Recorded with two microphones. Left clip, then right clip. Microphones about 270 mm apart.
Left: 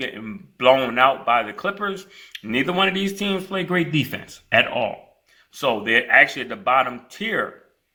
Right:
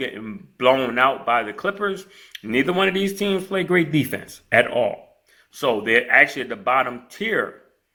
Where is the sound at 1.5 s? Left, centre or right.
Left.